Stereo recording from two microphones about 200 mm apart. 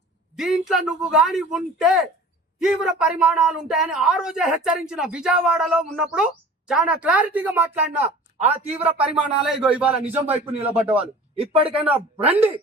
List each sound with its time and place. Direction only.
0.3 s a man's voice: centre (ahead or behind)
8.4 s speech: 30° right (ahead or behind)
8.8 s speech: 5° right (ahead or behind)
10.2 s speech: 30° right (ahead or behind)
10.7 s speech: 5° right (ahead or behind)
12.2 s speech: 30° right (ahead or behind)